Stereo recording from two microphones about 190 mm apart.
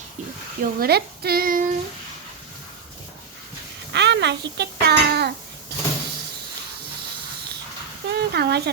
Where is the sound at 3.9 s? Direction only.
65° right (ahead or behind).